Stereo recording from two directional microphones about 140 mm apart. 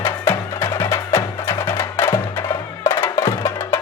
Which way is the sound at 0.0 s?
15° left (ahead or behind).